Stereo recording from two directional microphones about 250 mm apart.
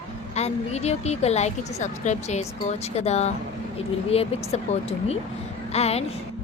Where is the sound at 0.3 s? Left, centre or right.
Left.